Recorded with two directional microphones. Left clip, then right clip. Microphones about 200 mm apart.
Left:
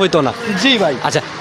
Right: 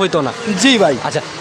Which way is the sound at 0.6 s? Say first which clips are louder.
Right 2 dB; 40° right (ahead or behind).